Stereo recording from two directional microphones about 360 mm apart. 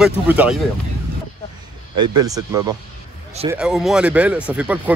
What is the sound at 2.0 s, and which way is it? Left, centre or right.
Speech, centre.